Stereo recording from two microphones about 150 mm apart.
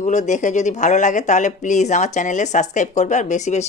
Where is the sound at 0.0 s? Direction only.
55° left (ahead or behind).